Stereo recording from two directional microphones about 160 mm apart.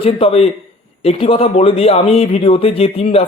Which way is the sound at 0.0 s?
35° left (ahead or behind).